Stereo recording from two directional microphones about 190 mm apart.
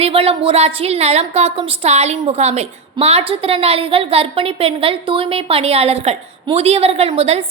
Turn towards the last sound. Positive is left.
turn(degrees=-30)  # may be behind; listen again after turning